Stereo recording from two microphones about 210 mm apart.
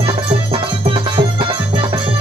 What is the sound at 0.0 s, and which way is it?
Music, 25° right (ahead or behind).